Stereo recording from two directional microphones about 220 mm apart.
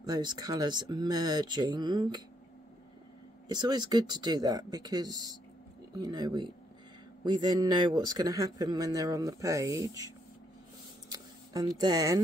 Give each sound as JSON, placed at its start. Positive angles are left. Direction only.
{"t": 0.0, "sound": "speech", "side_deg": -20}
{"t": 3.4, "sound": "speech", "side_deg": -20}
{"t": 11.1, "sound": "a sound", "side_deg": -20}